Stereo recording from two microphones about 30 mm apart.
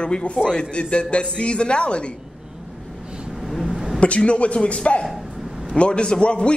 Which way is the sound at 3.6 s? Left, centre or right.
Centre.